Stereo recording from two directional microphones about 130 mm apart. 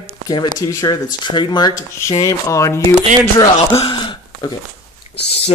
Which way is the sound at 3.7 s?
40° left (ahead or behind).